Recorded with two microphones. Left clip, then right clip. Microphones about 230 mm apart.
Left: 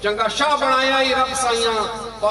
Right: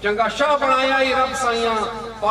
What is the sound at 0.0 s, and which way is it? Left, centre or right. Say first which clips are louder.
A man's voice: even; left.